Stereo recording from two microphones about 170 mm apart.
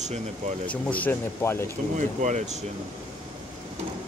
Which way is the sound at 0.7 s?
10° left (ahead or behind).